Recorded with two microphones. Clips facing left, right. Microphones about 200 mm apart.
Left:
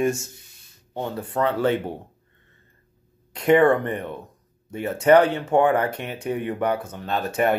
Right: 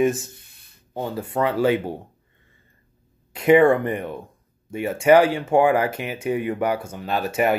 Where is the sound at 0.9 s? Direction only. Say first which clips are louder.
Right 1 dB; 5° right (ahead or behind).